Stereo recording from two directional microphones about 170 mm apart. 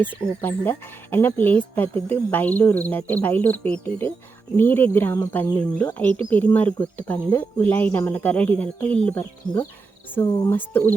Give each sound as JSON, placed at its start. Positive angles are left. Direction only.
{"t": 0.0, "sound": "speech", "side_deg": 10}
{"t": 10.2, "sound": "speech", "side_deg": 20}
{"t": 10.5, "sound": "speech", "side_deg": 10}